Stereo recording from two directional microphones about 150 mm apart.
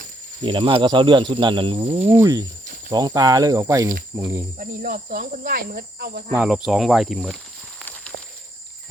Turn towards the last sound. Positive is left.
turn(degrees=0)  # may be behind; listen again after turning